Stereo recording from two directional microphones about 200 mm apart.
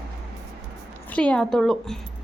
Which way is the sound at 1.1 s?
5° left (ahead or behind).